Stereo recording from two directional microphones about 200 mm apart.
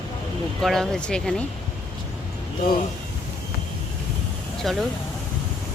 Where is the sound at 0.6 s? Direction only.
Centre (ahead or behind).